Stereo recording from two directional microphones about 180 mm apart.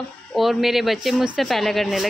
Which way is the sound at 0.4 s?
Centre (ahead or behind).